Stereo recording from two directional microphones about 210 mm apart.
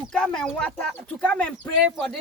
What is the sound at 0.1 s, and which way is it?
Speech, 5° left (ahead or behind).